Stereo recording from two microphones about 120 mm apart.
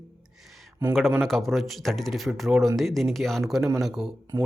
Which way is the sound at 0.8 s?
20° right (ahead or behind).